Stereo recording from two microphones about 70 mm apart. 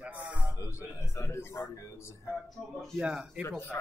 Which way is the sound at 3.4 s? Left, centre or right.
Left.